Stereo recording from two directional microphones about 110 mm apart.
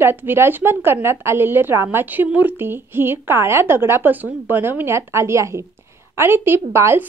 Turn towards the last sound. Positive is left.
turn(degrees=-25)  # may be behind; listen again after turning